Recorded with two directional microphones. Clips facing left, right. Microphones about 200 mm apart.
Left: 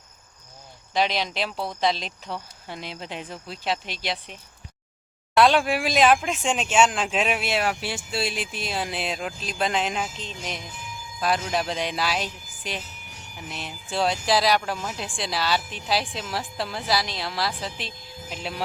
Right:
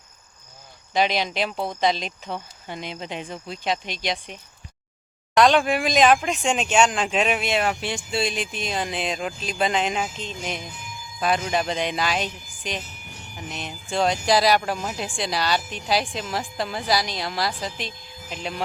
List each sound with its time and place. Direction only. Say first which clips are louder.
0.9 s speech: right 2 dB; centre (ahead or behind)